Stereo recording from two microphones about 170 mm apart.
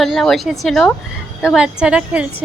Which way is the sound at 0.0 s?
Centre (ahead or behind).